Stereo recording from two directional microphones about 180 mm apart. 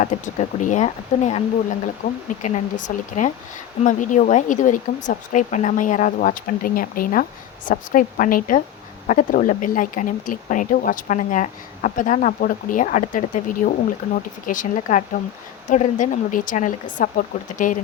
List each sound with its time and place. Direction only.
0.0 s speech: 45° left (ahead or behind)
2.4 s speech: 45° left (ahead or behind)